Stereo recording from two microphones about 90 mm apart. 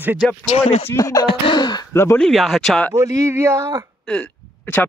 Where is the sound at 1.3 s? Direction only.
60° left (ahead or behind).